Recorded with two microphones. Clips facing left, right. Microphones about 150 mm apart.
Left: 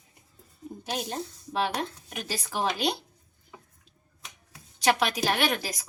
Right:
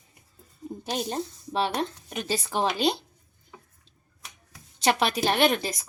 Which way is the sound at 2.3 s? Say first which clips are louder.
Right 3 dB; 25° right (ahead or behind).